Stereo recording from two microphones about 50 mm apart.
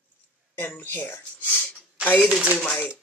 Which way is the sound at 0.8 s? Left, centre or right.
Left.